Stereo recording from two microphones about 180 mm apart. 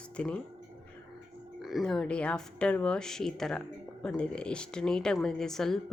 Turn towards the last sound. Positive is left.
turn(degrees=0)  # may be behind; listen again after turning